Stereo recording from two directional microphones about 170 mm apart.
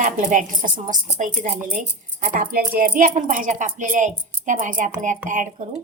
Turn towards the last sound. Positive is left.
turn(degrees=-50)  # may be behind; listen again after turning